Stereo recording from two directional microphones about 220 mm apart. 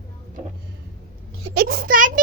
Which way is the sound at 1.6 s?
45° right (ahead or behind).